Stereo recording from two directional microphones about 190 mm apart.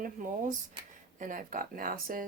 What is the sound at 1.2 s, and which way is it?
Speech, 45° right (ahead or behind).